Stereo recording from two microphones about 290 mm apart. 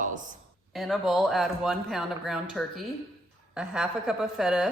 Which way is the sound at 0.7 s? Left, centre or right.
Centre.